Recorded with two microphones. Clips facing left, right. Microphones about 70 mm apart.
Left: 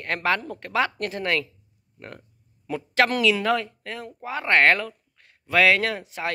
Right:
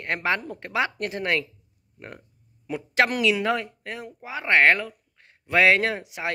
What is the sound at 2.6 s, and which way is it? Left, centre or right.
Speech, centre.